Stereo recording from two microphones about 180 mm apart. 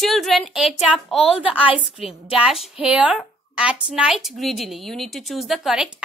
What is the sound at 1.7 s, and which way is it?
Speech, 30° left (ahead or behind).